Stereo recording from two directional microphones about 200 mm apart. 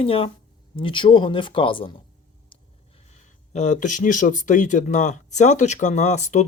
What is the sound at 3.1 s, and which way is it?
Speech, 35° left (ahead or behind).